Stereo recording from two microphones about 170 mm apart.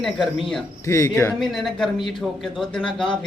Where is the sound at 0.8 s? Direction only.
15° left (ahead or behind).